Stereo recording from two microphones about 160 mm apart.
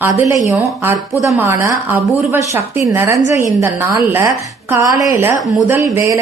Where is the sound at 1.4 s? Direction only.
15° right (ahead or behind).